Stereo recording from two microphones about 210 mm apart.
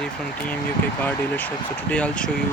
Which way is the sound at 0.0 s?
5° left (ahead or behind).